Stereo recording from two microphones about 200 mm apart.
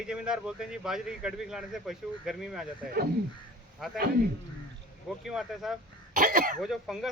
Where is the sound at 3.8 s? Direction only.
Centre (ahead or behind).